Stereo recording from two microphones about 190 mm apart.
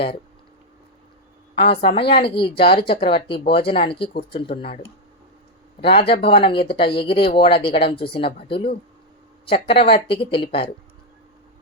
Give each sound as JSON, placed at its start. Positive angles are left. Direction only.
{"t": 1.5, "sound": "speech", "side_deg": 30}
{"t": 5.8, "sound": "speech", "side_deg": 30}